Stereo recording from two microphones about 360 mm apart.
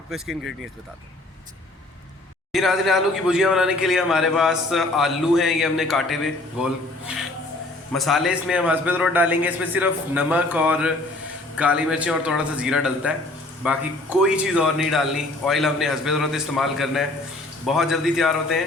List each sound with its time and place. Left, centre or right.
0.1 s speech: centre
2.5 s speech: centre
7.9 s speech: centre